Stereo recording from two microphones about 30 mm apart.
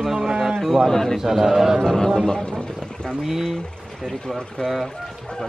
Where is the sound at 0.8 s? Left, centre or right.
Centre.